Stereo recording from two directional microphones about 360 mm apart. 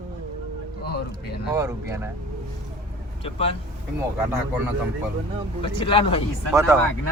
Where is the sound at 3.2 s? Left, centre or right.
Centre.